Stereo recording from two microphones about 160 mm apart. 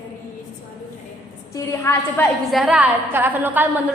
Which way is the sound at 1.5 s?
20° left (ahead or behind).